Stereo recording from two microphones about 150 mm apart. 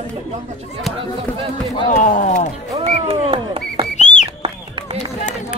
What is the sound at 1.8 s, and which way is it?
Speech, 55° left (ahead or behind).